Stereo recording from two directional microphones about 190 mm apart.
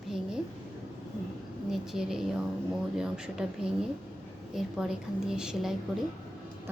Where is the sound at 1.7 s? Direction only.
5° right (ahead or behind).